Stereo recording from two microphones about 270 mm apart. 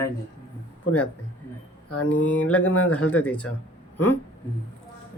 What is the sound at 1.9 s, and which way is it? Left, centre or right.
Speech, left.